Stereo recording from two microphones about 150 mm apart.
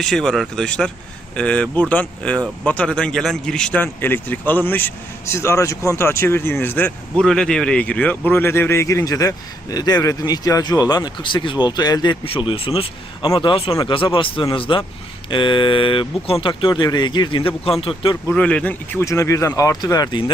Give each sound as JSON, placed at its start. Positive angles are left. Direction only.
{"t": 0.0, "sound": "speech", "side_deg": 5}
{"t": 18.3, "sound": "speech", "side_deg": 10}